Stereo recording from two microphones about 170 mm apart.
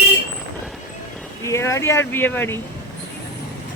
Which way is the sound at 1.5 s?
15° left (ahead or behind).